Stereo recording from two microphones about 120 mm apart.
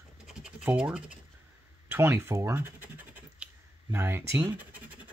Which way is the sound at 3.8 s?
20° right (ahead or behind).